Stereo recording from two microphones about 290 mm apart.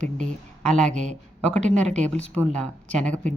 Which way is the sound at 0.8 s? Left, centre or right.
Right.